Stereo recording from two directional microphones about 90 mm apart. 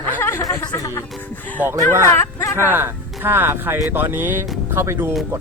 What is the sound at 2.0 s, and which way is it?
Speech, 30° left (ahead or behind).